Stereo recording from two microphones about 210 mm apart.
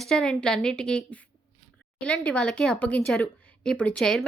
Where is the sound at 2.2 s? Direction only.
5° left (ahead or behind).